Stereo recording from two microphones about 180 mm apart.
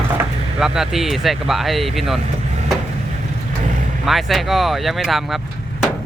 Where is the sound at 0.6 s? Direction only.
5° right (ahead or behind).